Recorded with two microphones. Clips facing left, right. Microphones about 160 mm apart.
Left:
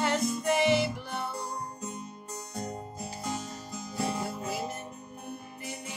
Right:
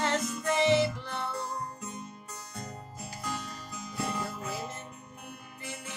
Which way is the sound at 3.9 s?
30° left (ahead or behind).